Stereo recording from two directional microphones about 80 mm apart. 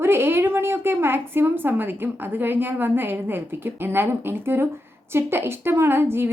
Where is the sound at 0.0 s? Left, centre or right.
Right.